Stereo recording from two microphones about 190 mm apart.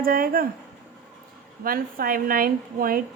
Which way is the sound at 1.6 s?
50° right (ahead or behind).